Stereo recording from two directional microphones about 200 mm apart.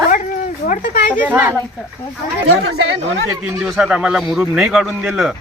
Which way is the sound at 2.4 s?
80° right.